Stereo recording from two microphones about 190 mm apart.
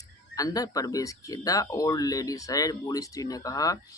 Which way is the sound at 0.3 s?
20° left (ahead or behind).